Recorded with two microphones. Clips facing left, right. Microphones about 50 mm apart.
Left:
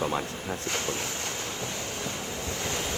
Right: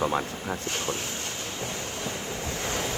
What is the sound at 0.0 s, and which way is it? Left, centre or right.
Speech, centre.